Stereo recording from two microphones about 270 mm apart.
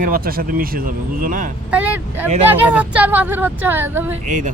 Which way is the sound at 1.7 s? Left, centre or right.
Centre.